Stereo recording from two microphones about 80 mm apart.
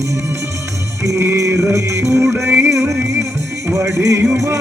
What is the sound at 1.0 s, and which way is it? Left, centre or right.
Music, right.